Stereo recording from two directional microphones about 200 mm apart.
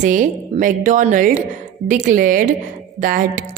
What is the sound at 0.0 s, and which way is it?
A woman's voice, 40° right (ahead or behind).